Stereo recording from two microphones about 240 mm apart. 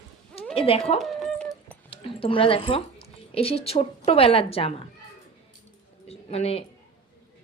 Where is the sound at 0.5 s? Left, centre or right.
Left.